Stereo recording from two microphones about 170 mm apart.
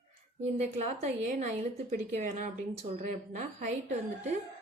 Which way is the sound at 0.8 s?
45° right (ahead or behind).